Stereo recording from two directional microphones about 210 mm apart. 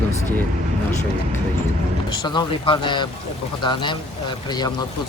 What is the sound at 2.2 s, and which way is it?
Speech, 20° left (ahead or behind).